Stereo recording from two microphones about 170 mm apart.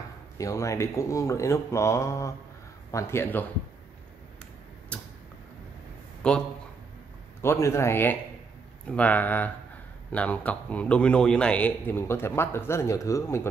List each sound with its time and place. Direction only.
0.4 s speech: 20° left (ahead or behind)
4.9 s tick-tock: 10° left (ahead or behind)
6.2 s speech: 5° left (ahead or behind)
7.4 s speech: 15° left (ahead or behind)